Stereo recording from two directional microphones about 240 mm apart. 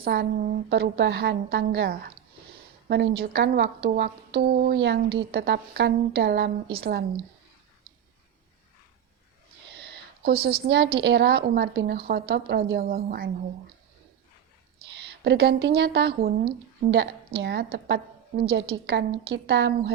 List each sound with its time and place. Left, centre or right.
0.0 s a woman's voice: right
3.2 s a woman's voice: right
9.6 s a sound: right
11.0 s a woman's voice: right
15.0 s a woman's voice: right